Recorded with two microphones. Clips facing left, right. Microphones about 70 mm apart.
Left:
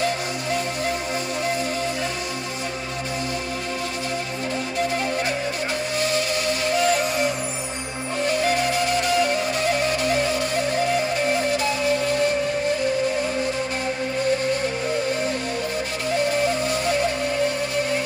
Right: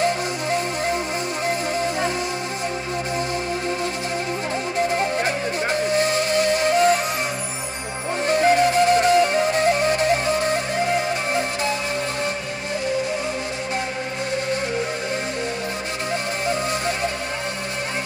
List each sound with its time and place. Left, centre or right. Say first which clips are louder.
5.9 s music: right 3 dB; right
8.3 s music: right 6 dB; right